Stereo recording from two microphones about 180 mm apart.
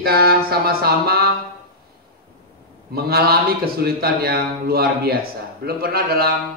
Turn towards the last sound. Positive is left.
turn(degrees=-60)  # may be behind; listen again after turning